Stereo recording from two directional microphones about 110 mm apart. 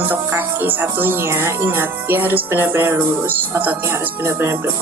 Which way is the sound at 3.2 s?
20° right (ahead or behind).